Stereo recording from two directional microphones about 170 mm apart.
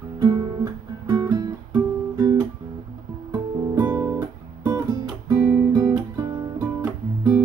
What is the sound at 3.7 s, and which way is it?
Guitar, 25° right (ahead or behind).